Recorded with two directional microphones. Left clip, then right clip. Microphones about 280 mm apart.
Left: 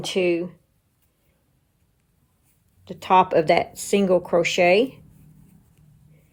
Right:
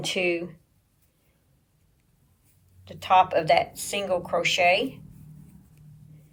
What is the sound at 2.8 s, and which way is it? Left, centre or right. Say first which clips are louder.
Speech: left 2 dB; centre.